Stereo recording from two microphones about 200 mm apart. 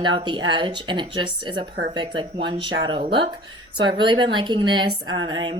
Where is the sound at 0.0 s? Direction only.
25° right (ahead or behind).